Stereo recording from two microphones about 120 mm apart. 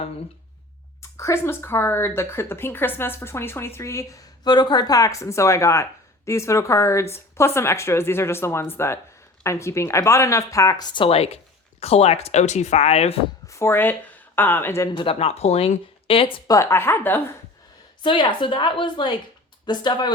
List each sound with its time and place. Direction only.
1.1 s speech: 25° left (ahead or behind)
4.4 s speech: 35° left (ahead or behind); by 13.1 s 60° left (ahead or behind)
13.5 s speech: 20° left (ahead or behind)
14.9 s speech: 50° left (ahead or behind)
16.5 s speech: 25° left (ahead or behind)
18.0 s a woman's voice: 40° left (ahead or behind)